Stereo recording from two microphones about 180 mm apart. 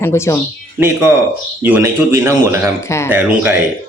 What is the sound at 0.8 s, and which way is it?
A man's voice, 15° right (ahead or behind).